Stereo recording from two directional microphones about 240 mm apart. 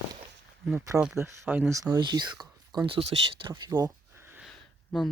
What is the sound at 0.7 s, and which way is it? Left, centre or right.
Speech, centre.